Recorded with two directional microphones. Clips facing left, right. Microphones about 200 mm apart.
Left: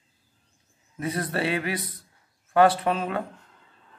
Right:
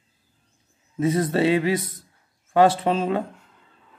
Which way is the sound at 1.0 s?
25° right (ahead or behind).